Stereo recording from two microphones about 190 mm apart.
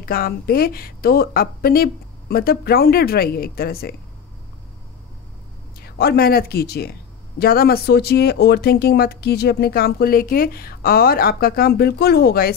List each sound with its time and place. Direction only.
0.0 s speech: 50° left (ahead or behind)
5.8 s speech: 55° left (ahead or behind)